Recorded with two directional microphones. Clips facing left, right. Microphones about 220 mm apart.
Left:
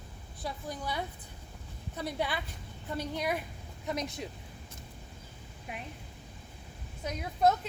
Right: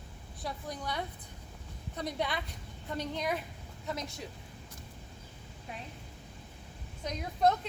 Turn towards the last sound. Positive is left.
turn(degrees=5)  # may be behind; listen again after turning